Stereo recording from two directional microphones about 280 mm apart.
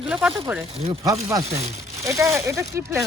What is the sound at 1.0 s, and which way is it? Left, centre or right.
Speech, centre.